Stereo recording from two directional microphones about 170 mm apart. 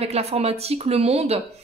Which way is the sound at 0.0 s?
40° right (ahead or behind).